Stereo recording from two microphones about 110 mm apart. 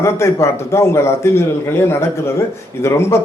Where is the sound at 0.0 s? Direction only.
25° left (ahead or behind).